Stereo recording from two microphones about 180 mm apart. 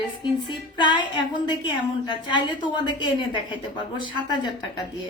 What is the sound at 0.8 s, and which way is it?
A woman's voice, 25° left (ahead or behind).